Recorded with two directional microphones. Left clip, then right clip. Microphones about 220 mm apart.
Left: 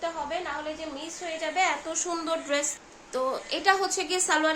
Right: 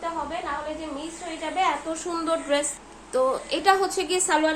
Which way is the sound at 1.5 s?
20° left (ahead or behind).